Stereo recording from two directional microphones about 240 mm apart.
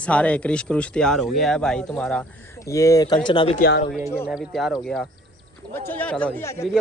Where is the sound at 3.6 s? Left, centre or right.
Left.